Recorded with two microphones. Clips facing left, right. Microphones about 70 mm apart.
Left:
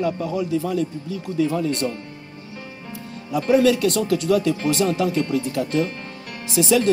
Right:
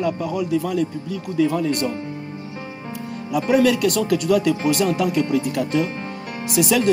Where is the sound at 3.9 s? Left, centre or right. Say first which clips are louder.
Right 1 dB; left.